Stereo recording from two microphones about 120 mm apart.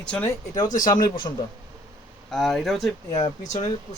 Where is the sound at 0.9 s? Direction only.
40° left (ahead or behind).